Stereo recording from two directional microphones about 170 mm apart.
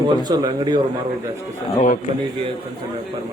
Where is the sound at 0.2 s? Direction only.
25° right (ahead or behind).